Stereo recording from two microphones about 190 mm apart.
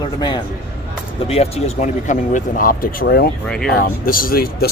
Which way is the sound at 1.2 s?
30° left (ahead or behind).